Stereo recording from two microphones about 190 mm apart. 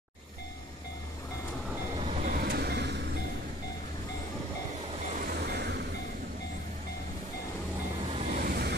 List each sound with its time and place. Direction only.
2.0 s vehicle: 35° right (ahead or behind); by 3.1 s 65° right (ahead or behind)
5.2 s vehicle: 55° right (ahead or behind)
8.1 s vehicle: 35° right (ahead or behind)
8.4 s vehicle: 55° right (ahead or behind)